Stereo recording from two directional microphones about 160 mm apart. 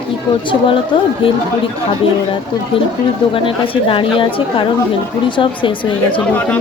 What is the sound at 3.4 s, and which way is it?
Speech, 35° left (ahead or behind).